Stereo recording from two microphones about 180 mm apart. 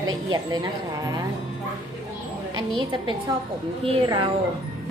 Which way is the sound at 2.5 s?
25° right (ahead or behind).